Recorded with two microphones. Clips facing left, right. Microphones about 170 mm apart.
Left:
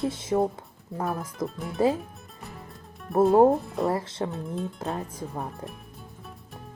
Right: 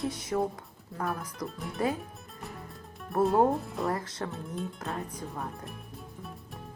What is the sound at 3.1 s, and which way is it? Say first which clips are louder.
Speech: left 5 dB; centre (ahead or behind).